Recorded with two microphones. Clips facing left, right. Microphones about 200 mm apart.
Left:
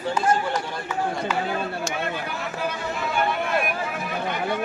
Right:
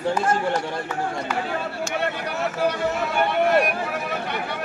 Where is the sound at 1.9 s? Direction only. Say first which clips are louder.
Right 2 dB; 65° right (ahead or behind).